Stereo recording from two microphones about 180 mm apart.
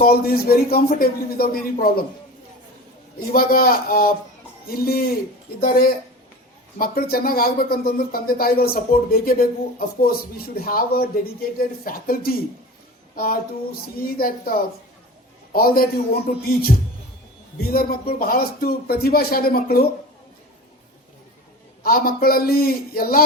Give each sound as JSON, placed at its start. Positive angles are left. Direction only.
{"t": 0.0, "sound": "speech", "side_deg": 55}
{"t": 3.3, "sound": "speech", "side_deg": 55}
{"t": 13.1, "sound": "a sound", "side_deg": 55}
{"t": 13.8, "sound": "speech", "side_deg": 55}
{"t": 17.7, "sound": "speech", "side_deg": 55}
{"t": 21.8, "sound": "speech", "side_deg": 55}